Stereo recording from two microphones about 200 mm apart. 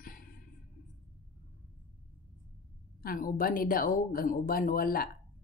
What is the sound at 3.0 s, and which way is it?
Speech, 45° left (ahead or behind).